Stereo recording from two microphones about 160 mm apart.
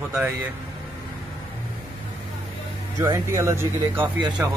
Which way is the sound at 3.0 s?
20° right (ahead or behind).